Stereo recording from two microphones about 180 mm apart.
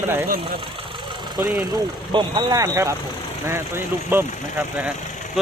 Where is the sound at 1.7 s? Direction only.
25° right (ahead or behind); by 4.9 s 10° right (ahead or behind).